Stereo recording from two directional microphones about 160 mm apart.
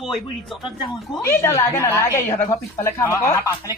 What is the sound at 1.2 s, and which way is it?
A woman's voice, 20° left (ahead or behind).